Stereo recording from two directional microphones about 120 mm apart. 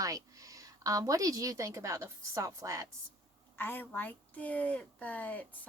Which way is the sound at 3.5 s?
15° left (ahead or behind).